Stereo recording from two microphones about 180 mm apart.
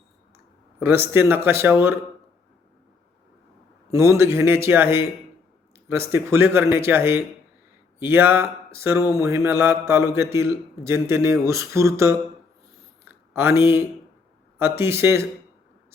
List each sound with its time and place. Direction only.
0.8 s mantra: 15° right (ahead or behind)
3.9 s mantra: 15° right (ahead or behind)
13.1 s a sound: 15° right (ahead or behind)
14.6 s mantra: 15° right (ahead or behind)